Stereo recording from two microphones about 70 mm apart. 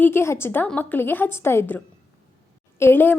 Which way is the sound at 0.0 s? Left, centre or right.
Left.